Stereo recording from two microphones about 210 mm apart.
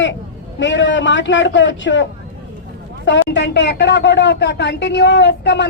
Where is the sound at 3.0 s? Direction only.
60° left (ahead or behind).